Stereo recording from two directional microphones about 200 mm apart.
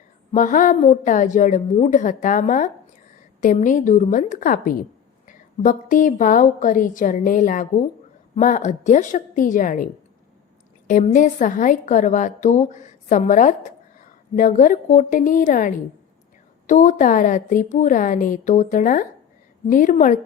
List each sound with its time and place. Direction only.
0.3 s a woman's voice: 40° left (ahead or behind)